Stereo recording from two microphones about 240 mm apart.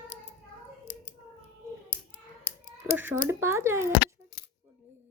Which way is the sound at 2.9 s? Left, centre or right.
Centre.